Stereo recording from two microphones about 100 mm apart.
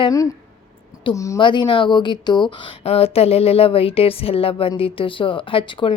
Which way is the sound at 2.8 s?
90° left.